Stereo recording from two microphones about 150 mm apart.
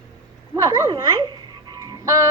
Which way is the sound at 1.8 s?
25° right (ahead or behind).